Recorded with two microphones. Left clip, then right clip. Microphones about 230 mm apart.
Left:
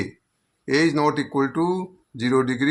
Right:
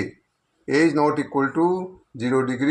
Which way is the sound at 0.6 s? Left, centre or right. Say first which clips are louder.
Right 1 dB; left.